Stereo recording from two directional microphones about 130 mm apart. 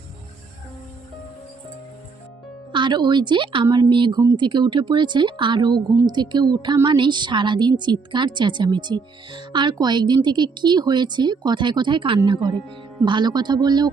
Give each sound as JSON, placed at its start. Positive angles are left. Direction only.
{"t": 2.7, "sound": "a woman's voice", "side_deg": -35}